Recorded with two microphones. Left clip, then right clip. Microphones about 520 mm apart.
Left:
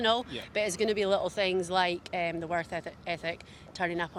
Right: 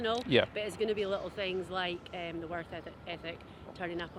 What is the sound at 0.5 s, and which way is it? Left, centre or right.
Speech, left.